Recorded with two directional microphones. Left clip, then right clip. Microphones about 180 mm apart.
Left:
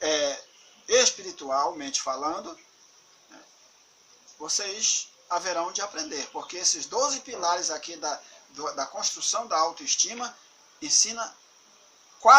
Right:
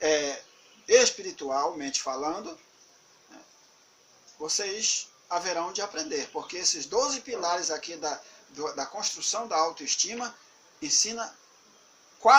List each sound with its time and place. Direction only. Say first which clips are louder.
0.0 s a sound: even; 15° left (ahead or behind)
0.9 s speech: right 1 dB; 15° left (ahead or behind)
4.4 s speech: left 1 dB; 15° left (ahead or behind)